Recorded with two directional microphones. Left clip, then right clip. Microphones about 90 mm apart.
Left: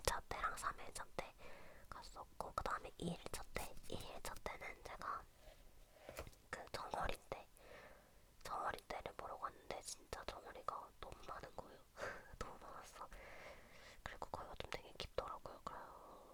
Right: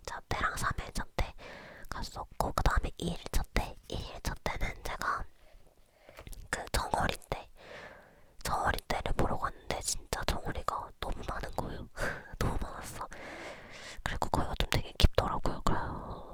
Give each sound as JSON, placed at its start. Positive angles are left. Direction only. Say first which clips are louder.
{"t": 0.2, "sound": "whispering", "louder": "right 11 dB", "side_deg": -30}
{"t": 6.2, "sound": "whispering", "louder": "right 14 dB", "side_deg": -45}
{"t": 6.8, "sound": "whispering", "louder": "right 10 dB", "side_deg": -30}